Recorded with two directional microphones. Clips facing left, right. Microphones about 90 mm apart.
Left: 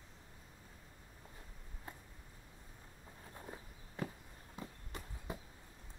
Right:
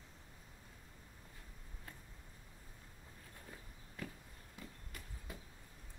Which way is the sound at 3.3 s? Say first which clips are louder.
Left 6 dB; 30° left (ahead or behind).